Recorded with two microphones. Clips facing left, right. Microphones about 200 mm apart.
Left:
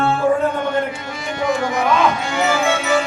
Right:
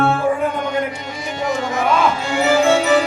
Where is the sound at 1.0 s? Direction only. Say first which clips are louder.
Left 1 dB; 20° right (ahead or behind).